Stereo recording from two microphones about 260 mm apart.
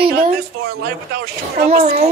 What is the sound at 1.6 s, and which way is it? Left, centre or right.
Speech, right.